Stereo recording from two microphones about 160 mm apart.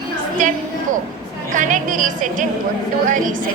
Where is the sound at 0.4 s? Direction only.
55° right (ahead or behind).